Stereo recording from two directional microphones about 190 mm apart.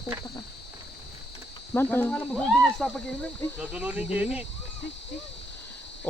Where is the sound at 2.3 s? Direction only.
Centre (ahead or behind).